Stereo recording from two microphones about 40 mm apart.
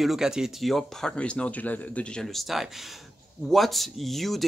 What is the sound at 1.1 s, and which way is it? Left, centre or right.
Speech, left.